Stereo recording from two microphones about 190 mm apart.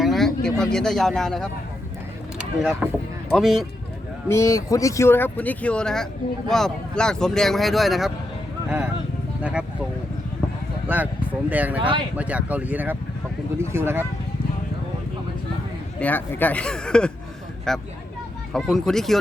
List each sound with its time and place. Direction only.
0.0 s speech: centre (ahead or behind)
4.3 s speech: 15° left (ahead or behind); by 8.1 s centre (ahead or behind)
9.4 s speech: 5° right (ahead or behind)
10.8 s speech: 10° right (ahead or behind)
11.8 s speech: 25° right (ahead or behind)
12.1 s speech: 5° right (ahead or behind)
16.0 s speech: 10° left (ahead or behind)